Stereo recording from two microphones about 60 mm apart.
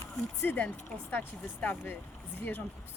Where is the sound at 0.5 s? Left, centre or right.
Left.